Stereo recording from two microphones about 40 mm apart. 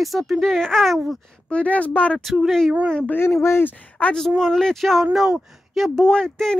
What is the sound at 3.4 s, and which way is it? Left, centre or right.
Speech, left.